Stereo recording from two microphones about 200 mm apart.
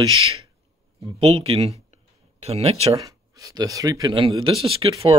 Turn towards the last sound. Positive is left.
turn(degrees=-30)  # may be behind; listen again after turning